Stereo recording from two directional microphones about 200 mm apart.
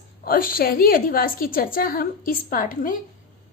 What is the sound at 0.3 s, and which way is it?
A woman's voice, 45° left (ahead or behind).